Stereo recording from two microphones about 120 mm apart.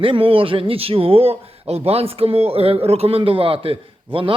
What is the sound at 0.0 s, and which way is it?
Speech, 50° right (ahead or behind).